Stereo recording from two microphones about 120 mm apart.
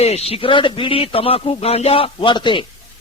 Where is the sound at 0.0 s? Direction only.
60° left (ahead or behind); by 2.6 s 40° left (ahead or behind).